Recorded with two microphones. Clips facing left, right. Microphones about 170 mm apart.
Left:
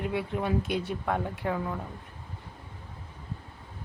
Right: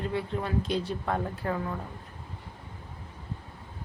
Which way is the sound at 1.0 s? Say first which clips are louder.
Even; 5° left (ahead or behind).